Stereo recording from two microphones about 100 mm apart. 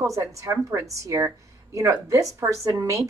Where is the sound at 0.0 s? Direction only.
30° right (ahead or behind).